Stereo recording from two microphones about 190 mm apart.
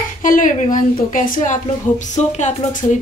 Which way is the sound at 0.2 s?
45° left (ahead or behind).